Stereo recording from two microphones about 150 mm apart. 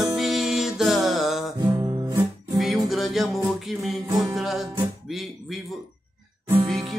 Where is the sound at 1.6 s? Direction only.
25° right (ahead or behind).